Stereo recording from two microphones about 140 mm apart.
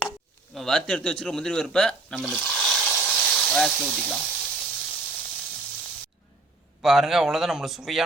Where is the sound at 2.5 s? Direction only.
5° left (ahead or behind).